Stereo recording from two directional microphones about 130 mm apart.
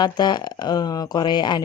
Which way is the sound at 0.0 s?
35° left (ahead or behind).